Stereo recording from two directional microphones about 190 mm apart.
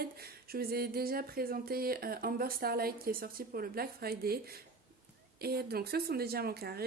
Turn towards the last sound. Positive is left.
turn(degrees=-55)  # may be behind; listen again after turning